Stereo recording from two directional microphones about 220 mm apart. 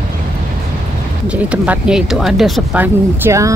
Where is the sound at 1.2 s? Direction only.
5° right (ahead or behind).